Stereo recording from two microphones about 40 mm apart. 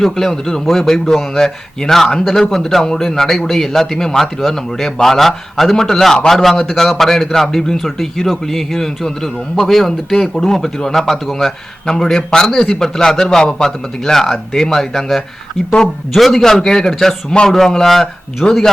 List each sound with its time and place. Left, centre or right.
0.0 s a man's voice: centre
6.2 s a man's voice: centre